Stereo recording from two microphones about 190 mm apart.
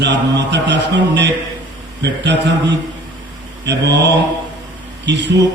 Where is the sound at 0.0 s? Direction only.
65° right (ahead or behind).